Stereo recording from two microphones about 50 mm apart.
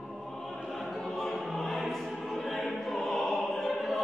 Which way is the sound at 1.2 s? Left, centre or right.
Centre.